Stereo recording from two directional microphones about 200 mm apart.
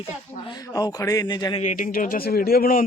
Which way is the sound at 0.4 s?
20° left (ahead or behind).